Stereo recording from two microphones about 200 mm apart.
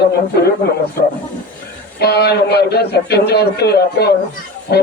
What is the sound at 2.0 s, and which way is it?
A man's voice, 55° left (ahead or behind).